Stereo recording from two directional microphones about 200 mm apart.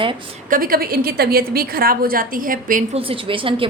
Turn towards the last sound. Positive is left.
turn(degrees=-25)  # may be behind; listen again after turning